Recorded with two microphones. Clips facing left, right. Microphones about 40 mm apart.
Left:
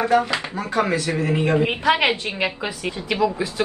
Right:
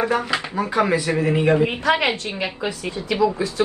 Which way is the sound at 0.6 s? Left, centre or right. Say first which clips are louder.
Right 2 dB; centre.